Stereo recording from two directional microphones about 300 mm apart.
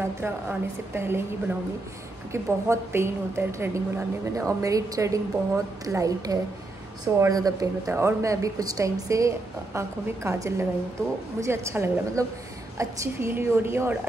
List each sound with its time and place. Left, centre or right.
0.0 s a woman's voice: centre
2.3 s a woman's voice: centre